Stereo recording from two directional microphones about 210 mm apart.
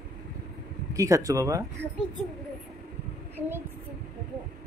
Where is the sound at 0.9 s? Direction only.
15° right (ahead or behind).